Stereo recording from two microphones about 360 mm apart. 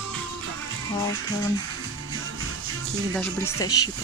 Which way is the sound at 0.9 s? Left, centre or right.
Centre.